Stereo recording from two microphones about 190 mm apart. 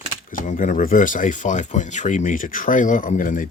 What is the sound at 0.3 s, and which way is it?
Speech, 45° left (ahead or behind).